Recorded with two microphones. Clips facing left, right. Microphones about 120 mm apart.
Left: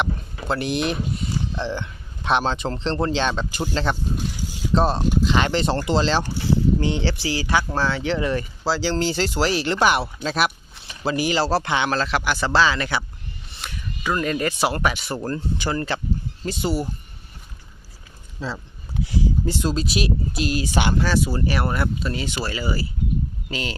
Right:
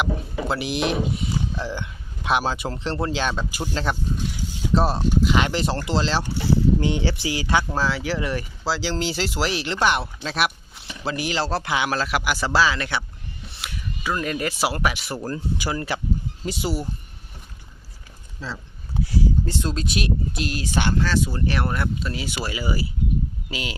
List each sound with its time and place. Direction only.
0.0 s speech: 5° right (ahead or behind)
6.7 s speech: 15° right (ahead or behind)
7.8 s speech: 5° right (ahead or behind)
18.3 s speech: 15° left (ahead or behind); by 23.7 s 10° right (ahead or behind)